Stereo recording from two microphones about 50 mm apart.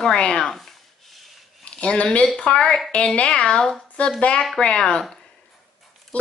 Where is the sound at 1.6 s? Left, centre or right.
Centre.